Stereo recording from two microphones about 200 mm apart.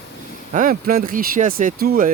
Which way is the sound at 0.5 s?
45° right (ahead or behind).